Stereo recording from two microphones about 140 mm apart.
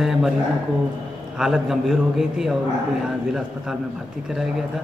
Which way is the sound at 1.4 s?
5° right (ahead or behind).